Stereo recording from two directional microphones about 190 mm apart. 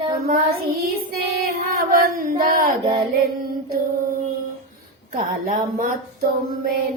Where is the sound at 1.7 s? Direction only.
50° right (ahead or behind).